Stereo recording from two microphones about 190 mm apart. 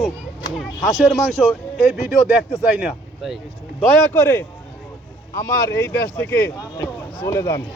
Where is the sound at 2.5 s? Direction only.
5° right (ahead or behind).